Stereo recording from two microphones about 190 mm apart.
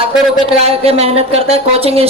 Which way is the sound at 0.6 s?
35° right (ahead or behind).